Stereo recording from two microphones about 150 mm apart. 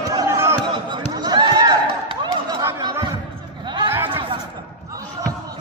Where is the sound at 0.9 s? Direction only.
30° right (ahead or behind).